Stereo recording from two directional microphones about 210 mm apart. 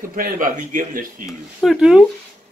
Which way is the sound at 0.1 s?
40° right (ahead or behind).